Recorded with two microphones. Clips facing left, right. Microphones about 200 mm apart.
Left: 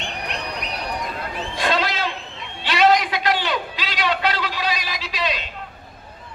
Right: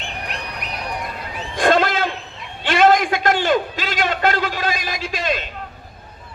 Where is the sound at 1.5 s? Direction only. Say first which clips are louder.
Right 7 dB; 50° right (ahead or behind).